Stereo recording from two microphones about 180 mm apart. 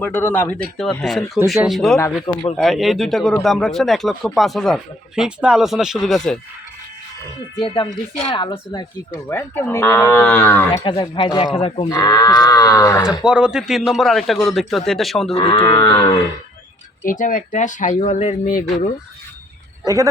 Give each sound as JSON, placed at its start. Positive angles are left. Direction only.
{"t": 0.0, "sound": "livestock", "side_deg": 10}
{"t": 1.5, "sound": "speech", "side_deg": 0}
{"t": 8.2, "sound": "livestock", "side_deg": 30}
{"t": 10.7, "sound": "livestock", "side_deg": 25}
{"t": 11.5, "sound": "speech", "side_deg": 35}
{"t": 11.9, "sound": "livestock", "side_deg": 20}
{"t": 13.1, "sound": "speech", "side_deg": -5}
{"t": 15.4, "sound": "livestock", "side_deg": 30}
{"t": 17.1, "sound": "speech", "side_deg": 45}
{"t": 19.8, "sound": "speech", "side_deg": -20}